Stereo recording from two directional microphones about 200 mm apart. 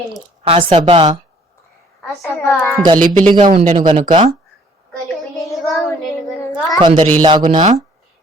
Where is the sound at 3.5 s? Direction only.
40° right (ahead or behind).